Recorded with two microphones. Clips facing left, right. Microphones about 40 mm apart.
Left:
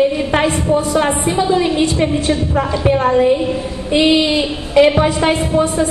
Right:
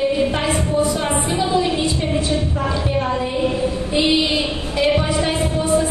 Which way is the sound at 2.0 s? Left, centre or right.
Left.